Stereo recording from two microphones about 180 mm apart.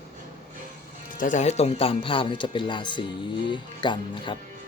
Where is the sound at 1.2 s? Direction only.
40° left (ahead or behind); by 4.3 s 25° left (ahead or behind).